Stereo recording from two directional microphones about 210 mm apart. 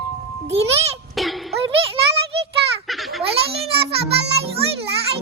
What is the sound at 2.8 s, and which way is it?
Baby laughter, centre (ahead or behind).